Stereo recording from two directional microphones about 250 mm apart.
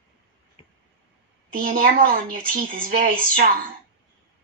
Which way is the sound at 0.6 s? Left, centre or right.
Left.